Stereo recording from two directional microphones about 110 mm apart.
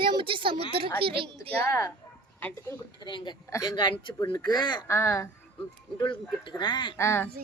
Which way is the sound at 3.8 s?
50° left (ahead or behind).